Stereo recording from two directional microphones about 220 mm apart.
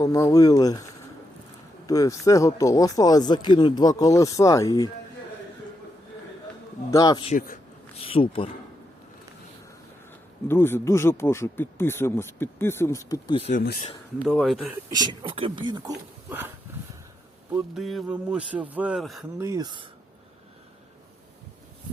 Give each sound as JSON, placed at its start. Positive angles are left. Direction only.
{"t": 0.0, "sound": "speech", "side_deg": 15}
{"t": 1.9, "sound": "speech", "side_deg": 15}
{"t": 6.9, "sound": "speech", "side_deg": 20}
{"t": 7.3, "sound": "a sound", "side_deg": 40}
{"t": 8.0, "sound": "speech", "side_deg": 25}
{"t": 10.5, "sound": "speech", "side_deg": 10}
{"t": 14.2, "sound": "a man's voice", "side_deg": 0}
{"t": 14.8, "sound": "speech", "side_deg": -20}
{"t": 17.5, "sound": "a man's voice", "side_deg": 0}
{"t": 19.4, "sound": "speech", "side_deg": -15}